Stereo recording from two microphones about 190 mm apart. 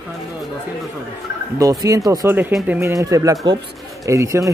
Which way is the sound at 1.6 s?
20° right (ahead or behind).